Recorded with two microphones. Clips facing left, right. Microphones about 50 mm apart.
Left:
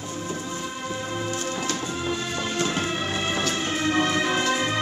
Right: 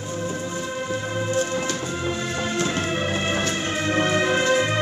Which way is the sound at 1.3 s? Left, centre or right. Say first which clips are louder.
Right 4 dB; right.